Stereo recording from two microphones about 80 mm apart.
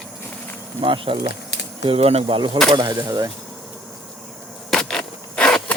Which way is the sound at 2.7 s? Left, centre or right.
Right.